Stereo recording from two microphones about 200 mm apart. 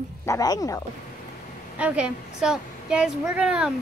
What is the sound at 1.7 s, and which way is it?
A woman's voice, 5° right (ahead or behind).